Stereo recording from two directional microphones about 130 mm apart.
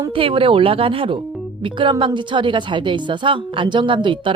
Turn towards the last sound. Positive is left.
turn(degrees=-40)  # may be behind; listen again after turning